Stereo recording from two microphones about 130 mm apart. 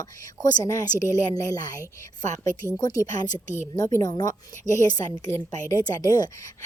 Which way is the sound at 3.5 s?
20° left (ahead or behind).